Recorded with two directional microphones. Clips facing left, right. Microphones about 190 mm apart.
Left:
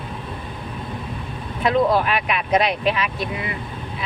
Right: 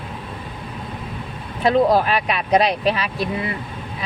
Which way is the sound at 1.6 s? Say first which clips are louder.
Right 2 dB; 35° right (ahead or behind).